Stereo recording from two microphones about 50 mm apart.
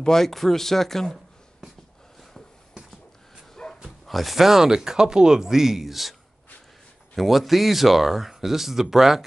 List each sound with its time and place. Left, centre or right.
0.0 s speech: centre
3.6 s bow-wow: centre
4.0 s speech: centre
7.2 s speech: centre